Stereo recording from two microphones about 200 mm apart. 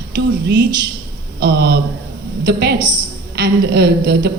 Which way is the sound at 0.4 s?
60° right (ahead or behind).